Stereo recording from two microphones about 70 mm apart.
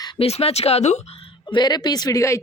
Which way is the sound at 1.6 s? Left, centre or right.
Left.